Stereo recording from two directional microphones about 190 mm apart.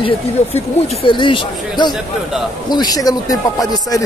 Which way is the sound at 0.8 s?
25° left (ahead or behind).